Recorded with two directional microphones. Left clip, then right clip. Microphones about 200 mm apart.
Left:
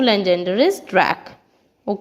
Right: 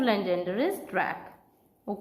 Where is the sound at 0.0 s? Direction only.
45° left (ahead or behind).